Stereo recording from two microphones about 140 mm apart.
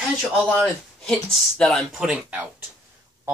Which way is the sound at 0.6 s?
Centre (ahead or behind).